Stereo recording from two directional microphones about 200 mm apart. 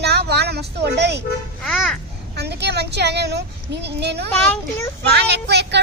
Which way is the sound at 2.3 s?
55° right (ahead or behind).